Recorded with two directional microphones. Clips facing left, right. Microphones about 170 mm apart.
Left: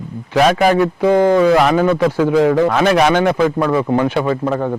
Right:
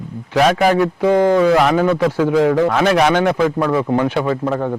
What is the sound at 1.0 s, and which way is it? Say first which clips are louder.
A man's voice: left 1 dB; 30° left (ahead or behind).